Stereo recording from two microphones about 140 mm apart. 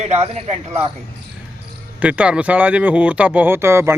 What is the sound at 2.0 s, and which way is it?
Speech, 10° right (ahead or behind).